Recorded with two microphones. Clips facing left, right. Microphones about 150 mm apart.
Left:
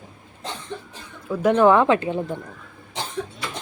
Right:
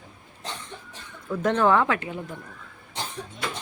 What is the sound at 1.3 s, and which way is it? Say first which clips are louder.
Speech: left 5 dB; 10° left (ahead or behind).